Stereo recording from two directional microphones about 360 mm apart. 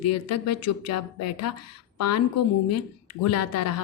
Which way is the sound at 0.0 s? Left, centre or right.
Left.